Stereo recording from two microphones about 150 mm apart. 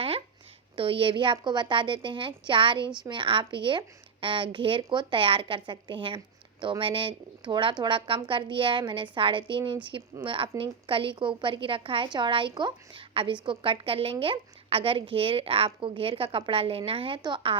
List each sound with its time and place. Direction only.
0.8 s a woman's voice: 35° right (ahead or behind)